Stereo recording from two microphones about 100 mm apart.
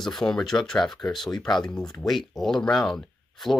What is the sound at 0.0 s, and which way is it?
Speech, 5° left (ahead or behind).